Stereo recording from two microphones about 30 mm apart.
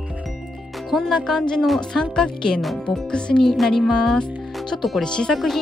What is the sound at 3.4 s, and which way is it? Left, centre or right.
Speech, centre.